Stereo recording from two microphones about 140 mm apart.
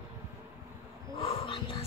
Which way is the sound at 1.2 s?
40° left (ahead or behind).